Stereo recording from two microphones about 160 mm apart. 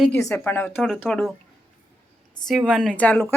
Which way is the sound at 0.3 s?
10° left (ahead or behind).